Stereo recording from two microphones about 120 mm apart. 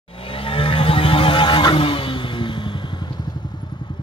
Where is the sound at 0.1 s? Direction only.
50° left (ahead or behind).